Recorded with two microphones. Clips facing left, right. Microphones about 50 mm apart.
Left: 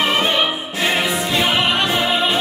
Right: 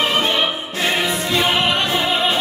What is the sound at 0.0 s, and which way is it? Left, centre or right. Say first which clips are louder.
Opera: left 1 dB; centre.